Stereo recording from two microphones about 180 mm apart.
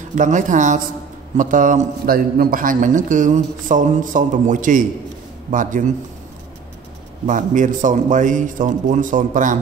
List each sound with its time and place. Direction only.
0.1 s a man's voice: 45° right (ahead or behind)
7.2 s a man's voice: 45° right (ahead or behind)